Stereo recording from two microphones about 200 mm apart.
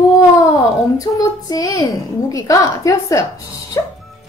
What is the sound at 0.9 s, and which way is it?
Child singing, 15° left (ahead or behind).